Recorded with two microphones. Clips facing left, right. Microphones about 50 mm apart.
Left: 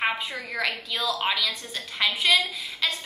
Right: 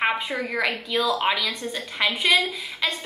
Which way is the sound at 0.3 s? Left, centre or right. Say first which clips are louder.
Right 4 dB; centre.